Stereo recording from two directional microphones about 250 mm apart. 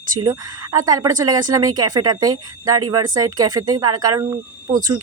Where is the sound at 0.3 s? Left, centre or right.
Centre.